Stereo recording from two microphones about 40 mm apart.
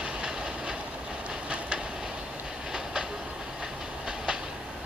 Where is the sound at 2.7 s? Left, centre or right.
Centre.